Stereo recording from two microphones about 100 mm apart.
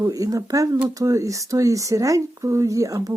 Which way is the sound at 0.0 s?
35° right (ahead or behind).